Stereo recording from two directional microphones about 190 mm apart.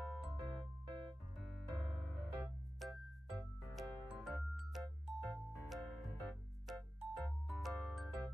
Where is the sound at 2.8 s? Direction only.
Centre (ahead or behind).